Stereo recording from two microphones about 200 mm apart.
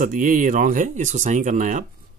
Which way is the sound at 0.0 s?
40° right (ahead or behind).